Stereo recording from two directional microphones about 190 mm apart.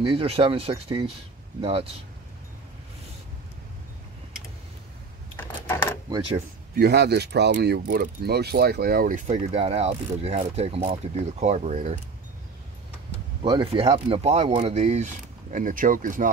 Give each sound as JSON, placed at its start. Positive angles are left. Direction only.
{"t": 0.0, "sound": "mechanisms", "side_deg": -30}
{"t": 5.3, "sound": "a sound", "side_deg": 10}
{"t": 6.0, "sound": "speech", "side_deg": -20}
{"t": 6.8, "sound": "speech", "side_deg": -60}
{"t": 7.5, "sound": "mechanisms", "side_deg": -50}
{"t": 13.4, "sound": "mechanisms", "side_deg": -25}
{"t": 15.5, "sound": "speech", "side_deg": -45}